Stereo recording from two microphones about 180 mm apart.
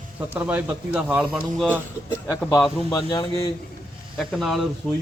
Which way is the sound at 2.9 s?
20° left (ahead or behind).